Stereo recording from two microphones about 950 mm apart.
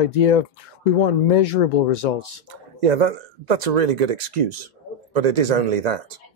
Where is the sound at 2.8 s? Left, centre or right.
Right.